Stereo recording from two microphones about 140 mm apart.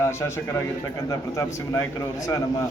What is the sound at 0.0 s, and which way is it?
Speech, 20° left (ahead or behind).